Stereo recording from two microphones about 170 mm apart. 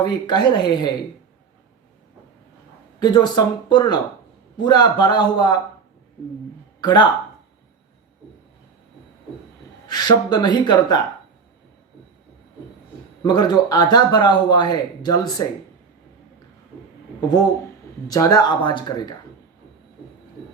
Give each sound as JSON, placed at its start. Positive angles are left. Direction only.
{"t": 0.0, "sound": "a man's voice", "side_deg": 25}
{"t": 3.0, "sound": "a man's voice", "side_deg": 25}
{"t": 6.8, "sound": "a man's voice", "side_deg": 25}
{"t": 9.8, "sound": "a man's voice", "side_deg": 25}
{"t": 13.2, "sound": "a man's voice", "side_deg": 25}
{"t": 18.1, "sound": "a man's voice", "side_deg": 20}